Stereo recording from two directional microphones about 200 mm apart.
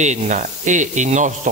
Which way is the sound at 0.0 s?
35° right (ahead or behind).